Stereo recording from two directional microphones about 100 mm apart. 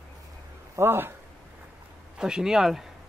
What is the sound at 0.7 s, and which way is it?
Speech, 25° right (ahead or behind).